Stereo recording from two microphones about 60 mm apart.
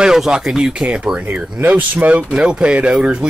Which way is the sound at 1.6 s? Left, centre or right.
Right.